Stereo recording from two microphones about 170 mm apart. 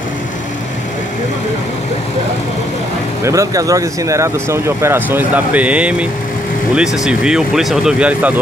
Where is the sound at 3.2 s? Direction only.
20° right (ahead or behind).